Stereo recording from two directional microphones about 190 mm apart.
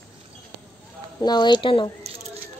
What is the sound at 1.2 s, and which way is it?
Speech, 20° left (ahead or behind).